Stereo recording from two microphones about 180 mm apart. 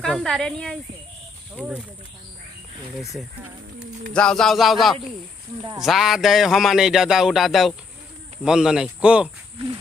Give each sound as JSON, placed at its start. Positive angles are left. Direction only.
{"t": 0.0, "sound": "a man's voice", "side_deg": 5}
{"t": 4.1, "sound": "a man's voice", "side_deg": 5}